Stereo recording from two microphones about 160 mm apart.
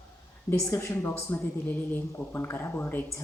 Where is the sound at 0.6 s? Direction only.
15° left (ahead or behind).